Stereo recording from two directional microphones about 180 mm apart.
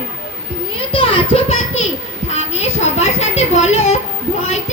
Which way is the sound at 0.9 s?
30° left (ahead or behind).